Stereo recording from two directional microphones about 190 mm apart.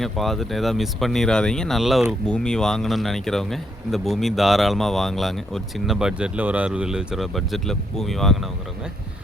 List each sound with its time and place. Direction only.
0.0 s speech: centre (ahead or behind)